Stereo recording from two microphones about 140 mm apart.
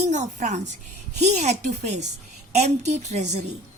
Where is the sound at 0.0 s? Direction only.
60° right (ahead or behind).